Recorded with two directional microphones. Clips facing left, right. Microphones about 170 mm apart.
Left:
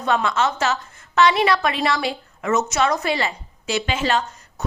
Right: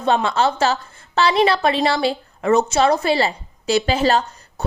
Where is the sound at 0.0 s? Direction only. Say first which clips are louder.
Right 3 dB; 30° right (ahead or behind).